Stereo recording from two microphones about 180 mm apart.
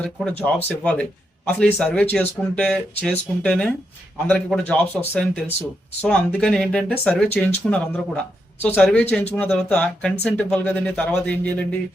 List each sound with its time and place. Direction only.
0.0 s speech: 5° left (ahead or behind)